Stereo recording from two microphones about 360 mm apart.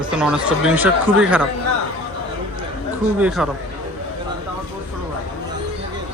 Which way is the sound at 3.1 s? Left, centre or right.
Centre.